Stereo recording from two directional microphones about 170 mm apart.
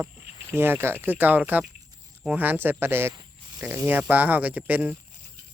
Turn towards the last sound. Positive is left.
turn(degrees=-10)  # may be behind; listen again after turning